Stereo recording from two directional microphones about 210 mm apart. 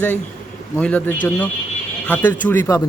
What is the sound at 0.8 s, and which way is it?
Speech, 5° left (ahead or behind).